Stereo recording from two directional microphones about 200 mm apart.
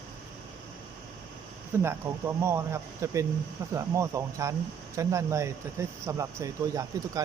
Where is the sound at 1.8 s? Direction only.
10° right (ahead or behind).